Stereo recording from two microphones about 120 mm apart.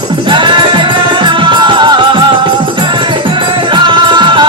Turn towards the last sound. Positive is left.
turn(degrees=-40)  # may be behind; listen again after turning